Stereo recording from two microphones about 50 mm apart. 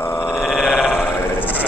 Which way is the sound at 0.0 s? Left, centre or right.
Left.